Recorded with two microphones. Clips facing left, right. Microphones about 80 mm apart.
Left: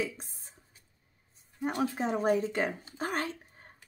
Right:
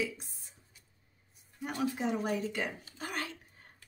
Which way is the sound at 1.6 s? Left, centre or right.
Left.